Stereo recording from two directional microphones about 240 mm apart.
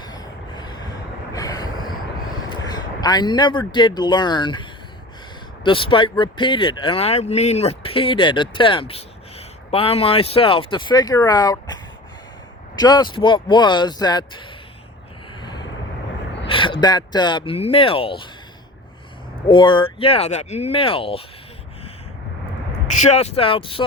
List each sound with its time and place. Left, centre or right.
0.0 s vehicle: centre
2.6 s speech: centre
5.6 s speech: left
16.5 s speech: left
19.5 s speech: centre
23.0 s speech: left